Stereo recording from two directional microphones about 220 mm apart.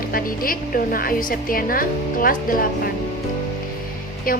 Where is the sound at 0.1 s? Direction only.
40° left (ahead or behind).